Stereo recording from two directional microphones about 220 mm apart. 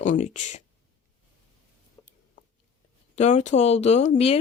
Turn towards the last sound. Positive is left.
turn(degrees=30)  # may be behind; listen again after turning